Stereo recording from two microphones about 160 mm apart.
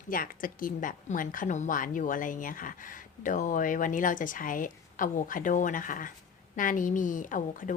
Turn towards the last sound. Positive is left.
turn(degrees=55)  # may be behind; listen again after turning